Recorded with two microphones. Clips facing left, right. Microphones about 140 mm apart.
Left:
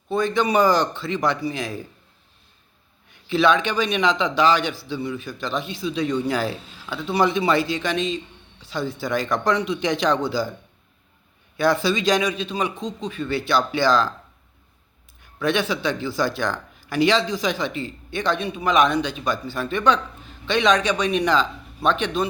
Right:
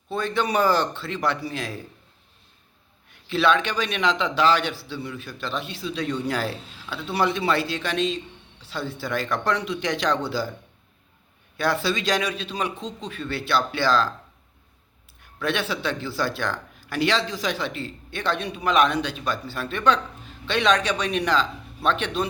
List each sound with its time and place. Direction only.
0.1 s a man's voice: 15° left (ahead or behind)
3.2 s a man's voice: 15° left (ahead or behind)
11.8 s a man's voice: 15° left (ahead or behind)
15.4 s a man's voice: 15° left (ahead or behind)